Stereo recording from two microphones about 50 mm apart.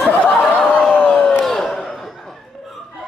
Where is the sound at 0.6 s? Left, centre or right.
Centre.